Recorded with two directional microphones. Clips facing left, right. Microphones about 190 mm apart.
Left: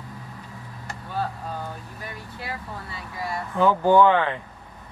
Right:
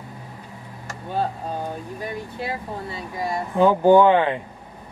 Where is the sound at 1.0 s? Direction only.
20° right (ahead or behind).